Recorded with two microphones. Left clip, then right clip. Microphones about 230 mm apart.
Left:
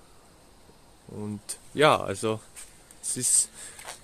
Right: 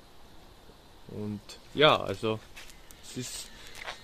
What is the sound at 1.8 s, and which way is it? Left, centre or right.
Speech, centre.